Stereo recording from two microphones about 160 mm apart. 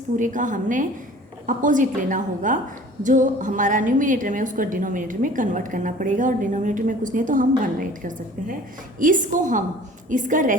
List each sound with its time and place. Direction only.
0.2 s a woman's voice: 50° right (ahead or behind)